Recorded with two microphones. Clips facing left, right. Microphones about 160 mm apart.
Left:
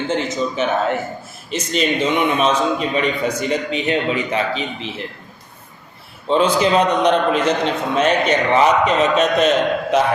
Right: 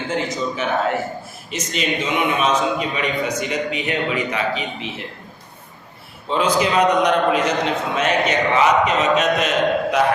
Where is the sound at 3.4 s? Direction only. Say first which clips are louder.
Left 2 dB; 30° left (ahead or behind).